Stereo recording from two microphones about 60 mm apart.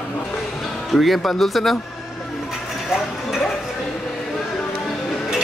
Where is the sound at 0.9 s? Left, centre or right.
Centre.